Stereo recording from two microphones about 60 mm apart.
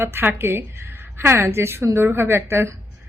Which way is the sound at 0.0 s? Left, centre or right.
Right.